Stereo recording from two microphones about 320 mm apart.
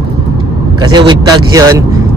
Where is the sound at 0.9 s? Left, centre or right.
Centre.